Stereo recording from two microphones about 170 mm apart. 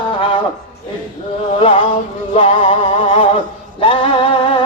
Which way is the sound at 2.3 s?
30° left (ahead or behind).